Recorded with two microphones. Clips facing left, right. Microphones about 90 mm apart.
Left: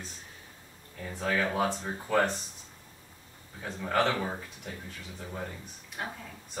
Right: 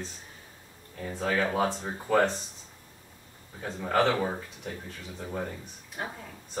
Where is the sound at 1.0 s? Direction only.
30° right (ahead or behind).